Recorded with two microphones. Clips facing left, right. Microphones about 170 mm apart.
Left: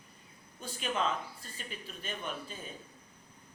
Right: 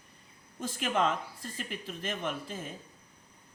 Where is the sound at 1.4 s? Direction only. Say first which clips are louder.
Right 6 dB; 90° right.